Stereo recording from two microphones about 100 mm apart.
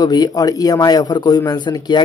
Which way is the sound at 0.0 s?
40° left (ahead or behind).